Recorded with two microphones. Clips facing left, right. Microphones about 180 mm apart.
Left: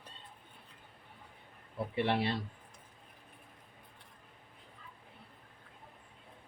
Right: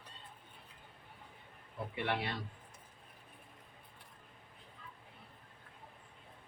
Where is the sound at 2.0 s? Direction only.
30° left (ahead or behind).